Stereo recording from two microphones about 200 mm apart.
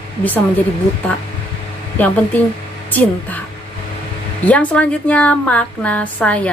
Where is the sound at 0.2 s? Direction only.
10° left (ahead or behind).